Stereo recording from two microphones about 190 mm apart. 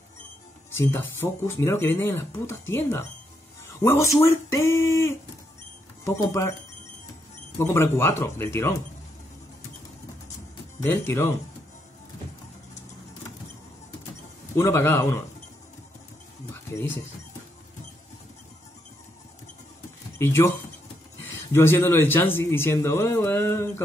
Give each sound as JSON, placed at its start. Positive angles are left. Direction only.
{"t": 0.7, "sound": "speech", "side_deg": 10}
{"t": 7.5, "sound": "speech", "side_deg": 15}
{"t": 10.8, "sound": "speech", "side_deg": 10}
{"t": 14.6, "sound": "speech", "side_deg": 15}
{"t": 20.2, "sound": "speech", "side_deg": 15}